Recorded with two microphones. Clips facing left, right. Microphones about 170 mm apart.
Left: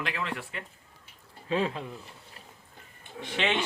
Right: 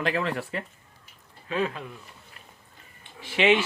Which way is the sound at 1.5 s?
25° left (ahead or behind).